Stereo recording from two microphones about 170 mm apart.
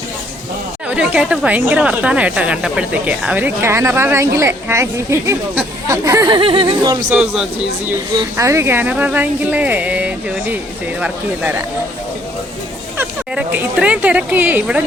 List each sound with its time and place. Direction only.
0.9 s speech: 5° right (ahead or behind); by 7.0 s 25° right (ahead or behind)
7.1 s a man's voice: 5° right (ahead or behind)
8.2 s speech: 15° right (ahead or behind)
13.0 s speech: 10° right (ahead or behind)